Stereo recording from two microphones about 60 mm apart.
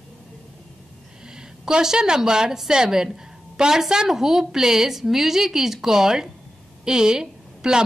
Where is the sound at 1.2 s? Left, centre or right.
Centre.